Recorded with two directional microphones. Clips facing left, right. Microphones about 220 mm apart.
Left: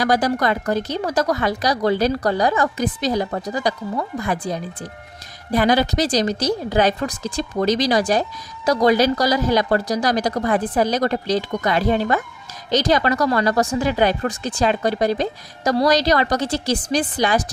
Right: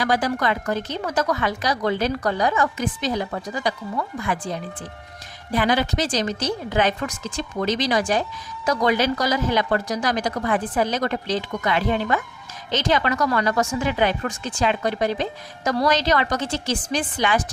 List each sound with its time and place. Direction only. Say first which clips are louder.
0.0 s a woman's voice: left 3 dB; 40° left (ahead or behind)